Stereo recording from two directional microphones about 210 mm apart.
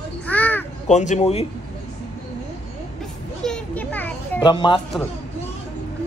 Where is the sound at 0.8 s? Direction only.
35° left (ahead or behind).